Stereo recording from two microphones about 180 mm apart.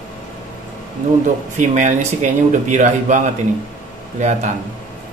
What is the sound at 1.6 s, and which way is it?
A man's voice, 45° right (ahead or behind).